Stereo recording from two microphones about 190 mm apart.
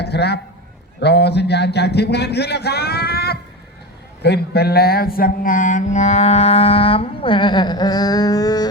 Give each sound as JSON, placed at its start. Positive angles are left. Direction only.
{"t": 0.0, "sound": "a sound", "side_deg": 60}
{"t": 0.9, "sound": "a man's voice", "side_deg": 60}
{"t": 4.2, "sound": "mantra", "side_deg": 60}